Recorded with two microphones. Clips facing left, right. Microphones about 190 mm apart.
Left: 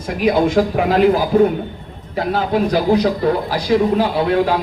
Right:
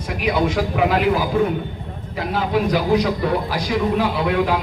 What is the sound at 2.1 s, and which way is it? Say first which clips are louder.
A man's voice: left 3 dB; 35° left (ahead or behind).